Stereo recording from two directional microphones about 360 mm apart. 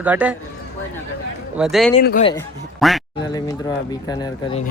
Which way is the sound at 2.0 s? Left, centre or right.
Left.